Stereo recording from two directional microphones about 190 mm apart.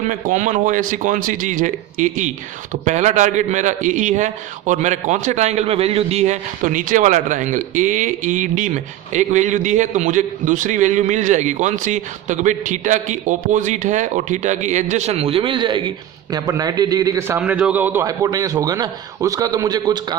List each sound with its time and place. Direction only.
0.0 s a man's voice: 40° right (ahead or behind); by 20.1 s 20° right (ahead or behind)